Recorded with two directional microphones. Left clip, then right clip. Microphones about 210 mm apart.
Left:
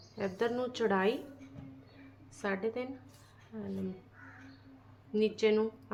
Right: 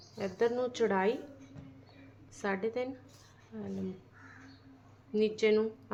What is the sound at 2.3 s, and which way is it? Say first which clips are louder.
A woman's voice: right 1 dB; 15° right (ahead or behind).